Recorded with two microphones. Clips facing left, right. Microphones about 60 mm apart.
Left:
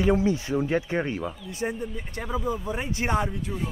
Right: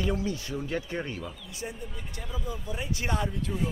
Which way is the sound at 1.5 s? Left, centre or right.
Left.